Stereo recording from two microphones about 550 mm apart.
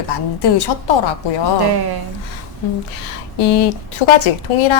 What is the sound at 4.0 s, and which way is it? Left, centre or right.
Speech, left.